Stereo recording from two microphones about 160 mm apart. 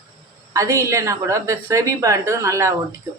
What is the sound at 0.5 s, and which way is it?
A woman's voice, 20° right (ahead or behind).